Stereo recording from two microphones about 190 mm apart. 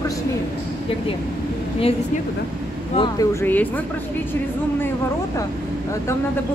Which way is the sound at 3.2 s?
10° left (ahead or behind).